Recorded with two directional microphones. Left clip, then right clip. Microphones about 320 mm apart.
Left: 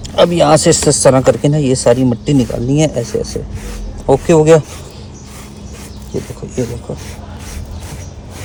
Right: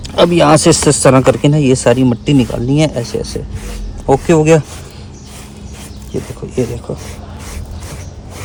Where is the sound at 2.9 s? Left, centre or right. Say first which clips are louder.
Left 1 dB; centre.